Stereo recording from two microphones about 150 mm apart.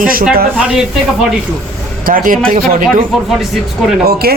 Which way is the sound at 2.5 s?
80° right.